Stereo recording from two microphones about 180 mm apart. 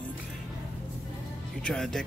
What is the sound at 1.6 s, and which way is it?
Speech, 5° left (ahead or behind).